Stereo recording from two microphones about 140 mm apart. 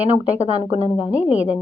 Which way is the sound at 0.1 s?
45° right (ahead or behind).